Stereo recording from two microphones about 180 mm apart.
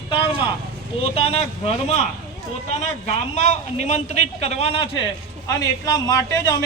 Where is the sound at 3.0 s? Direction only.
35° left (ahead or behind).